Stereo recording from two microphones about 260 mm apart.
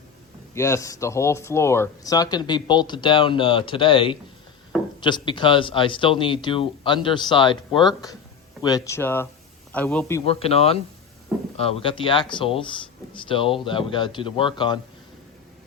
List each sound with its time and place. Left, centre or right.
0.5 s speech: centre
10.2 s speech: left